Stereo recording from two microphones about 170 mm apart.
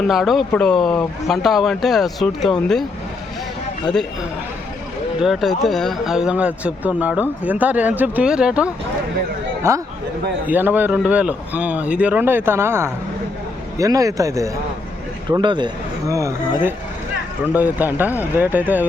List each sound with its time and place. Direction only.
0.1 s speech: centre (ahead or behind)
5.2 s speech: centre (ahead or behind); by 16.3 s 20° right (ahead or behind)
17.5 s speech: 10° right (ahead or behind)